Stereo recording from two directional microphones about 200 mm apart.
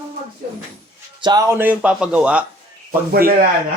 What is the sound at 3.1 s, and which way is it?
Speech, 45° right (ahead or behind).